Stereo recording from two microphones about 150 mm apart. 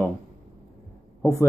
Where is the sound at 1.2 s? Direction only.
20° left (ahead or behind).